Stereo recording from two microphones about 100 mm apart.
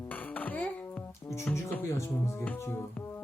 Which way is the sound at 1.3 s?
25° left (ahead or behind).